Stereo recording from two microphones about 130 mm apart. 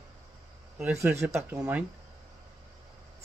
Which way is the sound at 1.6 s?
10° right (ahead or behind).